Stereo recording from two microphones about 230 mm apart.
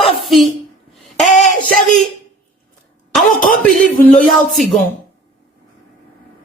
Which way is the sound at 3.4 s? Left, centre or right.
Left.